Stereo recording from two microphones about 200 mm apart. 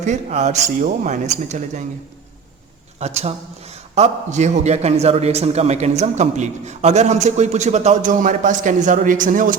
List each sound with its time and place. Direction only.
0.0 s a man's voice: 35° right (ahead or behind)
3.0 s a man's voice: 30° right (ahead or behind)